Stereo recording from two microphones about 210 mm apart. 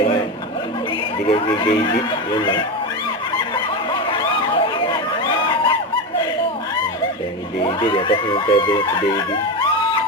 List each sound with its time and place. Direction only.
1.3 s speech: 25° left (ahead or behind)
3.3 s a sound: 20° left (ahead or behind)
7.6 s speech: 25° left (ahead or behind)